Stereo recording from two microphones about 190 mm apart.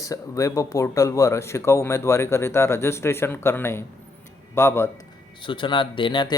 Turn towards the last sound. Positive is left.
turn(degrees=25)  # may be behind; listen again after turning